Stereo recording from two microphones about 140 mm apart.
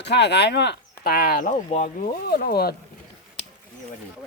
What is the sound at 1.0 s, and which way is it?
Speech, 90° left.